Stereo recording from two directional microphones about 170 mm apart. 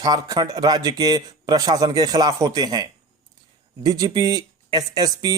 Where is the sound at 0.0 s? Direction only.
20° right (ahead or behind).